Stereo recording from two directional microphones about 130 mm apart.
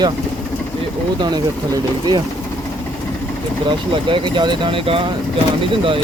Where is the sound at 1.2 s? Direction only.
35° right (ahead or behind).